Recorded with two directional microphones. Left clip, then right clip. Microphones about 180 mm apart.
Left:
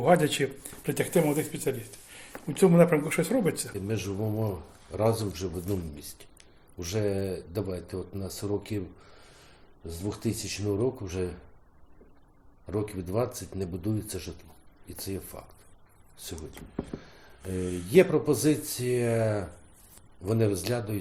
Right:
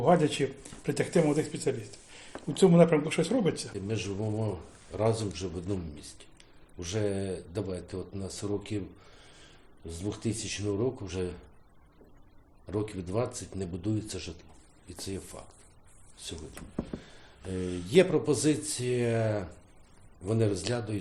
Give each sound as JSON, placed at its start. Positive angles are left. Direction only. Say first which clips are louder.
{"t": 0.0, "sound": "speech", "louder": "left 2 dB", "side_deg": 10}
{"t": 3.8, "sound": "speech", "louder": "left 2 dB", "side_deg": 30}
{"t": 9.8, "sound": "speech", "louder": "left 2 dB", "side_deg": 35}
{"t": 12.6, "sound": "speech", "louder": "left 2 dB", "side_deg": 30}
{"t": 17.8, "sound": "speech", "louder": "left 2 dB", "side_deg": 30}